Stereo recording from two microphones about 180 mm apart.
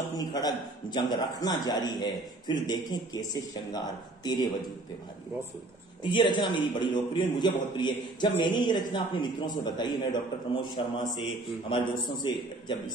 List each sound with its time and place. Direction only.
0.2 s a man's voice: 20° left (ahead or behind)
6.0 s a man's voice: 25° left (ahead or behind)
11.7 s a man's voice: 25° left (ahead or behind)